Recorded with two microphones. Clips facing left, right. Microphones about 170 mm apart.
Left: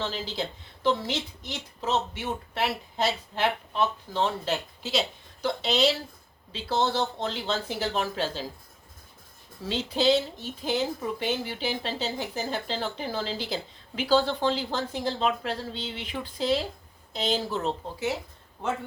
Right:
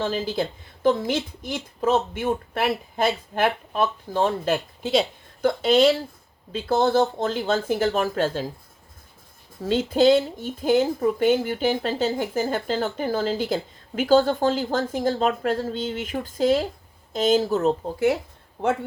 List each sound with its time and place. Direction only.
0.0 s speech: 50° right (ahead or behind)
9.6 s speech: 50° right (ahead or behind)